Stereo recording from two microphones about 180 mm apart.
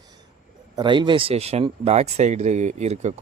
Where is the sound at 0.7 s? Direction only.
25° right (ahead or behind).